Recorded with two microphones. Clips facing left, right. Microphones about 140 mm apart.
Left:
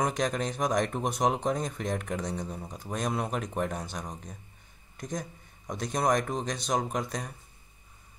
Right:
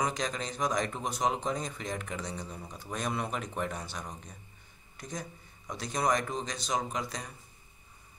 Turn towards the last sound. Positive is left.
turn(degrees=50)  # may be behind; listen again after turning